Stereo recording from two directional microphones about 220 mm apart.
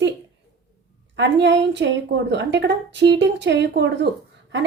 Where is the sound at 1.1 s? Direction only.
55° right (ahead or behind).